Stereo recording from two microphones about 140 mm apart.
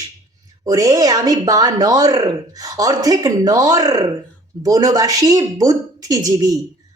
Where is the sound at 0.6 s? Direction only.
25° right (ahead or behind).